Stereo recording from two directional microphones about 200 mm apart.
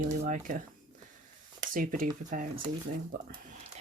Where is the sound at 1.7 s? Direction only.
45° right (ahead or behind).